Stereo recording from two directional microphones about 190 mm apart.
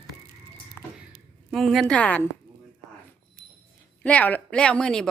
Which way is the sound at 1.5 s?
Centre (ahead or behind).